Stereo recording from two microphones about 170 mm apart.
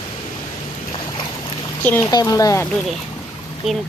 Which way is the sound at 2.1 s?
20° left (ahead or behind).